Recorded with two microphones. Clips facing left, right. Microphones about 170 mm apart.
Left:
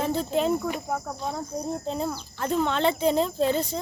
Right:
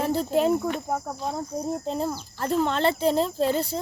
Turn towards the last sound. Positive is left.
turn(degrees=-5)  # may be behind; listen again after turning